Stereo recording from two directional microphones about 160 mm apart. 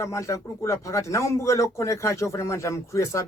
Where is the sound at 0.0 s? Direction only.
20° left (ahead or behind).